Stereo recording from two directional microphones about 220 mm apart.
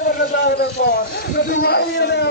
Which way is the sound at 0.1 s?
45° left (ahead or behind).